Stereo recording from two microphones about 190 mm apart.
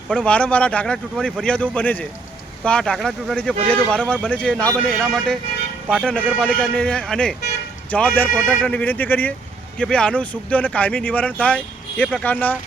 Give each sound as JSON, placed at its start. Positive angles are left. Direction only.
{"t": 0.1, "sound": "speech", "side_deg": 5}